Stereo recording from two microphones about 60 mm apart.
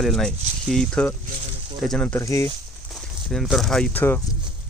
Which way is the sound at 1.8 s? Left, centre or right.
Centre.